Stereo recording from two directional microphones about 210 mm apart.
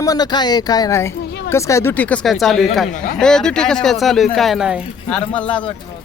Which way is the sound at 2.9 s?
40° left (ahead or behind).